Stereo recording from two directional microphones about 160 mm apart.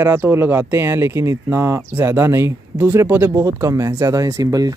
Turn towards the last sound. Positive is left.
turn(degrees=-20)  # may be behind; listen again after turning